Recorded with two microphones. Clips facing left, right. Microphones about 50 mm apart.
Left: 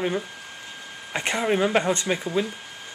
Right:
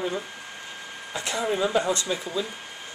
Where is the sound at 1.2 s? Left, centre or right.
Left.